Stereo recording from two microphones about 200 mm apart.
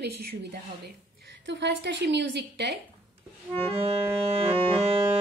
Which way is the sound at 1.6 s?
60° right (ahead or behind).